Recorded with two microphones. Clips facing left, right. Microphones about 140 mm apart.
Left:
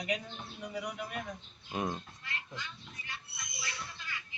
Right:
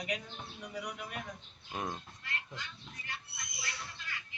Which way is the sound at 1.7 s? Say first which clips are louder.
Left 4 dB; 5° left (ahead or behind).